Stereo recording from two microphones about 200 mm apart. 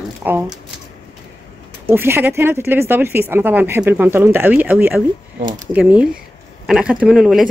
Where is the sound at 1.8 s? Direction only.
10° right (ahead or behind).